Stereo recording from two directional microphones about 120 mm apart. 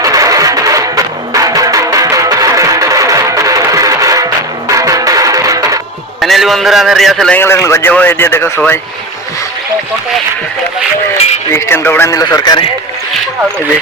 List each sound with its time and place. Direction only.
0.0 s music: 30° right (ahead or behind)
6.1 s a man's voice: centre (ahead or behind)
7.3 s speech: 20° left (ahead or behind)
11.5 s speech: 20° left (ahead or behind)